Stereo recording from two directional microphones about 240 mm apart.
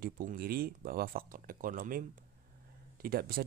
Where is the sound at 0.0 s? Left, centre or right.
Right.